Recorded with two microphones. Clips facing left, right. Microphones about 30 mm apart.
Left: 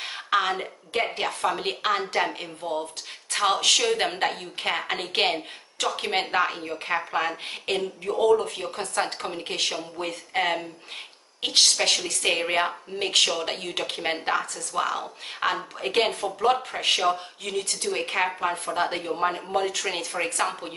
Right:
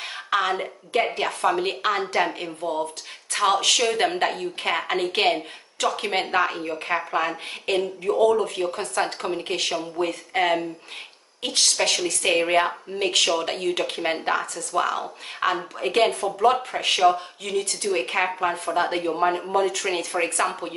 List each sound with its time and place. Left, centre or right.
0.0 s a woman's voice: centre
12.0 s a woman's voice: centre
16.0 s speech: centre
16.4 s a woman's voice: centre
19.5 s a woman's voice: centre
20.1 s speech: centre